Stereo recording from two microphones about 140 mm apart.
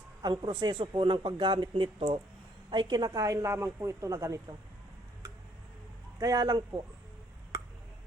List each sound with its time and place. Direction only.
0.2 s a woman's voice: 30° right (ahead or behind)
6.1 s a woman's voice: 25° right (ahead or behind)